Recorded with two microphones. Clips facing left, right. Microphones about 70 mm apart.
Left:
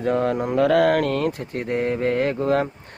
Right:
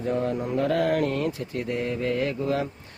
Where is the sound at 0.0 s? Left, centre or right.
Left.